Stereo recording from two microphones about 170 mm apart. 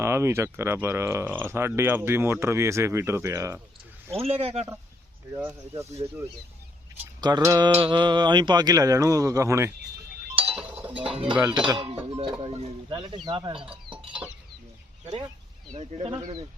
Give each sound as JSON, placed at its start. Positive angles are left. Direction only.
{"t": 0.0, "sound": "speech", "side_deg": -15}
{"t": 4.1, "sound": "speech", "side_deg": -35}
{"t": 5.3, "sound": "speech", "side_deg": -15}
{"t": 10.6, "sound": "chink", "side_deg": -5}
{"t": 11.3, "sound": "speech", "side_deg": -5}
{"t": 11.7, "sound": "speech", "side_deg": -30}
{"t": 15.7, "sound": "speech", "side_deg": -40}